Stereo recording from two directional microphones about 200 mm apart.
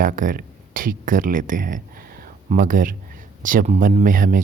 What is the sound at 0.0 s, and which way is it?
Speech, 45° right (ahead or behind).